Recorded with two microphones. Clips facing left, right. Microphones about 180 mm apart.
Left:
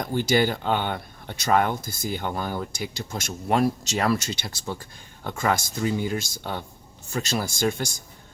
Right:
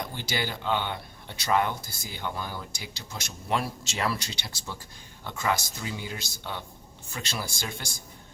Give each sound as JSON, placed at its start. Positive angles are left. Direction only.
{"t": 0.0, "sound": "speech", "side_deg": 50}